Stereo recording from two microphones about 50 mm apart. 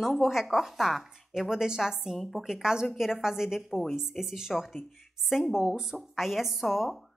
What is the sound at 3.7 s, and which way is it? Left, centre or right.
Speech, centre.